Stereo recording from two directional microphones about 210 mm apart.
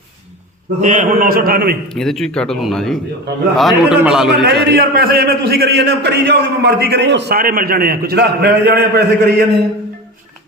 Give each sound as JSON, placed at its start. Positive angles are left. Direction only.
{"t": 0.8, "sound": "a man's voice", "side_deg": -40}
{"t": 1.9, "sound": "a man's voice", "side_deg": 0}
{"t": 4.7, "sound": "a man's voice", "side_deg": -50}